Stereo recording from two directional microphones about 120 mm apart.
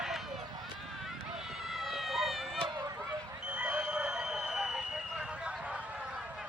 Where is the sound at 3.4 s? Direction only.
10° right (ahead or behind).